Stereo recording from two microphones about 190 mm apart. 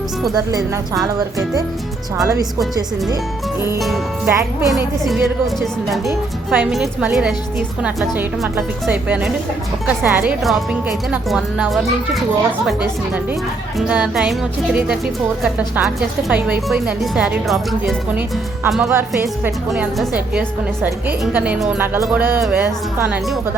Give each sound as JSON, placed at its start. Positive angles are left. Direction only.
{"t": 2.2, "sound": "a woman's voice", "side_deg": -15}
{"t": 3.8, "sound": "a woman's voice", "side_deg": 0}
{"t": 8.5, "sound": "a woman's voice", "side_deg": -10}
{"t": 13.7, "sound": "a woman's voice", "side_deg": -5}